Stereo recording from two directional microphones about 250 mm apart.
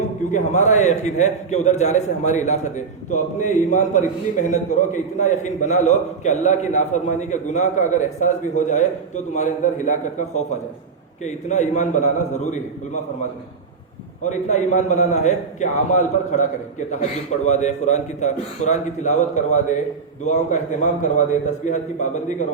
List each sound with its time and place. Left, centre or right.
0.3 s a man's voice: left
14.3 s a man's voice: left